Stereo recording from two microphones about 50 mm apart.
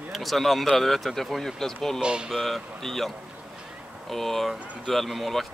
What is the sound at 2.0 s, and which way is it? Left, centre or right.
Speech, centre.